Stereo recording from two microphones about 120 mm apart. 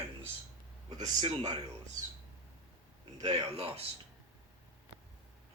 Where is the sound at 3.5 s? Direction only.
55° right (ahead or behind).